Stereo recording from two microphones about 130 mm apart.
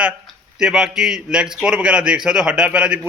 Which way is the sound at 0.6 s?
5° right (ahead or behind).